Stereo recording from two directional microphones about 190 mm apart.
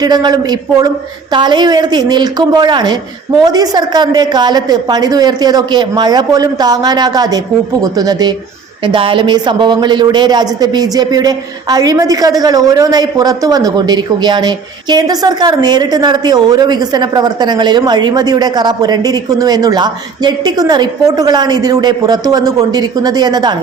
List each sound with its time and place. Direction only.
0.0 s speech: 20° right (ahead or behind)